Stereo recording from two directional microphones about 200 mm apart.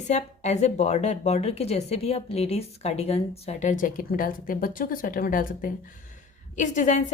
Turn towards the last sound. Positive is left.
turn(degrees=40)  # may be behind; listen again after turning